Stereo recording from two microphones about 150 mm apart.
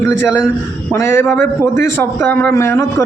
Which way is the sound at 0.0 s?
15° left (ahead or behind).